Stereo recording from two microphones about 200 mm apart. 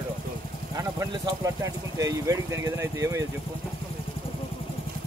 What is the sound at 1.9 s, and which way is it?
Speech, 15° right (ahead or behind).